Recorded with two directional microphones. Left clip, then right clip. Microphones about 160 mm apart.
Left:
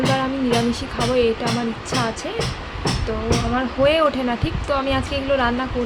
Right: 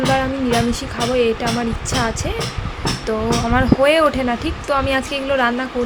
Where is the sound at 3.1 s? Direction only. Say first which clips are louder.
Right 5 dB; 25° right (ahead or behind).